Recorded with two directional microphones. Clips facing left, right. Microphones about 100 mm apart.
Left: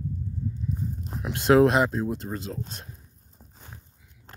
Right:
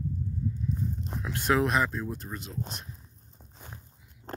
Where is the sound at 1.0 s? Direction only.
Centre (ahead or behind).